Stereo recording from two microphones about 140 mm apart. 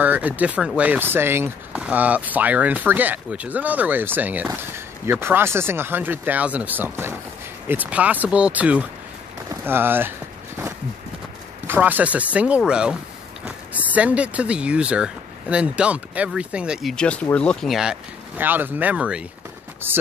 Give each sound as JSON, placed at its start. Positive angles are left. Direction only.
{"t": 0.0, "sound": "speech", "side_deg": -10}
{"t": 11.6, "sound": "speech", "side_deg": -15}
{"t": 16.9, "sound": "speech", "side_deg": 10}
{"t": 18.4, "sound": "speech", "side_deg": -15}